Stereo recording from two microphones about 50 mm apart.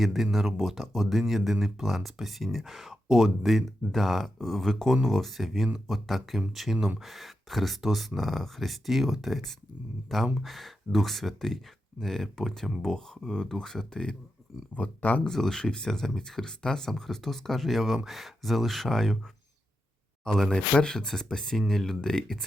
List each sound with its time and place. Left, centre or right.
0.0 s speech: centre
14.8 s speech: left
15.3 s speech: centre
20.2 s speech: centre